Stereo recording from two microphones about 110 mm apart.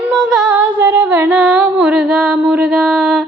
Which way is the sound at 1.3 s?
5° right (ahead or behind).